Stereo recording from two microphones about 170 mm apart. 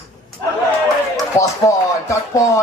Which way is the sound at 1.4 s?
20° left (ahead or behind).